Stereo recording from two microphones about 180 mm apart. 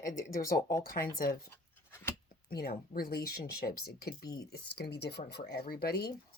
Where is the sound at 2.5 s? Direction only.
60° left (ahead or behind).